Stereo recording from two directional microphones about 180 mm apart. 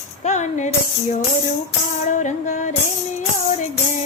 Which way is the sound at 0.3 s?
40° left (ahead or behind).